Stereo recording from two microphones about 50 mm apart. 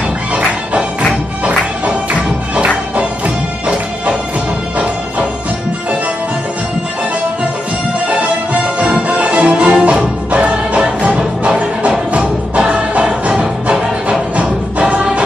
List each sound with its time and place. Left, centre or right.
1.4 s music: centre
8.1 s music: right